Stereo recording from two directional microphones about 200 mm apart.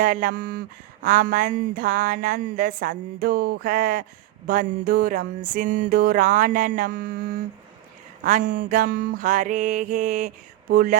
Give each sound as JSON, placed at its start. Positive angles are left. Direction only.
{"t": 0.0, "sound": "a woman's voice", "side_deg": -45}
{"t": 5.5, "sound": "mantra", "side_deg": -40}